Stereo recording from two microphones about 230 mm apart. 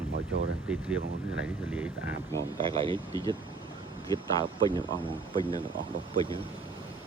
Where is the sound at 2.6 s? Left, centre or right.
Right.